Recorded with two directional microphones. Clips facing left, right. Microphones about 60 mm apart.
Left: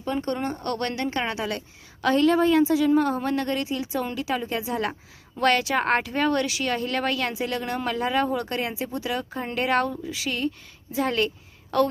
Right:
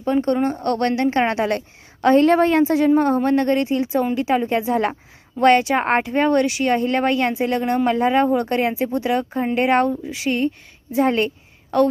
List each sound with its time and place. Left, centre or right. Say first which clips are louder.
0.0 s speech: right 8 dB; right
9.3 s speech: right 5 dB; right